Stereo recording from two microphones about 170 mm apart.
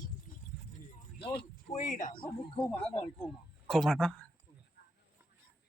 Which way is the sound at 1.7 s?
45° left (ahead or behind).